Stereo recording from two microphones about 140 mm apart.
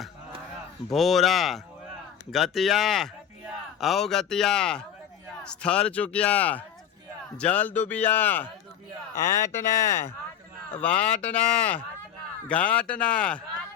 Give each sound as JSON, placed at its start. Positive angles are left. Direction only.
{"t": 0.9, "sound": "a man's voice", "side_deg": 0}